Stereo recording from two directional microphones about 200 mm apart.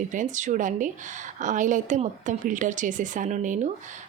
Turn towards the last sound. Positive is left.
turn(degrees=-40)  # may be behind; listen again after turning